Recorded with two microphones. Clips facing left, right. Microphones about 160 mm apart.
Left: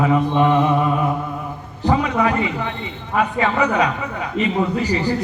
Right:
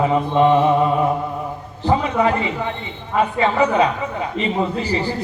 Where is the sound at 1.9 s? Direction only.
30° right (ahead or behind).